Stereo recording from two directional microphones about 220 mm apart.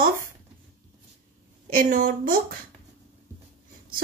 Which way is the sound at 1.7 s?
40° right (ahead or behind).